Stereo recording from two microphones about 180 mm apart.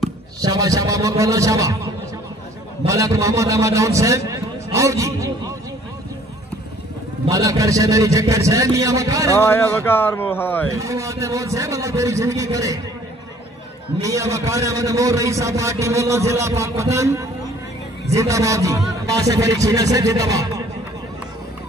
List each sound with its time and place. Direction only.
0.4 s a man's voice: 20° right (ahead or behind)
2.9 s a man's voice: 15° right (ahead or behind)
7.2 s a man's voice: 20° right (ahead or behind)
9.4 s speech: 10° left (ahead or behind)
10.7 s a man's voice: 15° right (ahead or behind)
14.0 s a man's voice: 15° right (ahead or behind)